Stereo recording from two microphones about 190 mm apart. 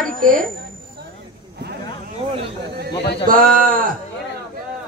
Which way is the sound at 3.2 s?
45° right (ahead or behind).